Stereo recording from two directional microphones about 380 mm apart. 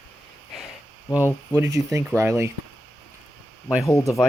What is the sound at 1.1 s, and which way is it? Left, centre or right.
Speech, centre.